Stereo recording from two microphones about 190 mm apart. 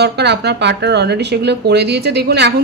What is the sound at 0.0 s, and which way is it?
Speech, 60° right (ahead or behind).